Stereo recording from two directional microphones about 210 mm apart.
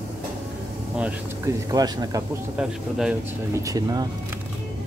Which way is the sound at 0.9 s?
5° right (ahead or behind).